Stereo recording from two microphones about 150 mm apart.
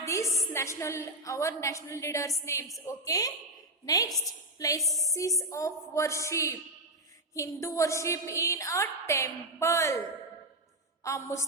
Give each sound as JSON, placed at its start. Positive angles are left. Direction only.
{"t": 0.0, "sound": "music", "side_deg": 20}
{"t": 0.5, "sound": "a woman's voice", "side_deg": 20}
{"t": 4.5, "sound": "music", "side_deg": 25}
{"t": 4.8, "sound": "a sound", "side_deg": 0}
{"t": 5.4, "sound": "a woman's voice", "side_deg": 20}
{"t": 11.0, "sound": "a woman's voice", "side_deg": 20}